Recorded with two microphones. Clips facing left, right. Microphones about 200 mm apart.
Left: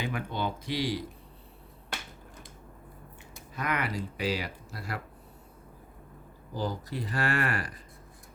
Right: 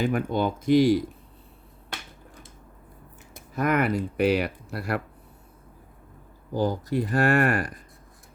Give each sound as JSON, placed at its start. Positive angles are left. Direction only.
{"t": 0.0, "sound": "speech", "side_deg": -50}
{"t": 3.5, "sound": "speech", "side_deg": -50}
{"t": 6.5, "sound": "speech", "side_deg": -50}